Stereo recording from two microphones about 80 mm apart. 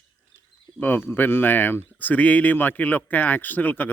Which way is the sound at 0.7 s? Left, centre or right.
Left.